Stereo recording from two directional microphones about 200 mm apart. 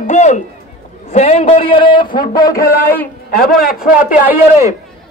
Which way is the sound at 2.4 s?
15° left (ahead or behind).